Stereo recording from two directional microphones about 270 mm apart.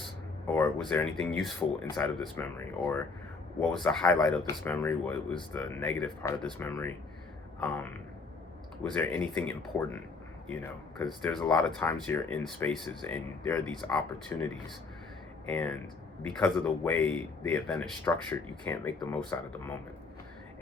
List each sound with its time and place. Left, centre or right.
0.5 s speech: centre
15.4 s speech: centre